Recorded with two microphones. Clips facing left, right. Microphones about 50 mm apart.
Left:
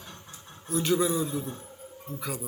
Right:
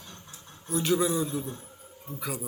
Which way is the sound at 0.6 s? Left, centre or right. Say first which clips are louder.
Even; centre.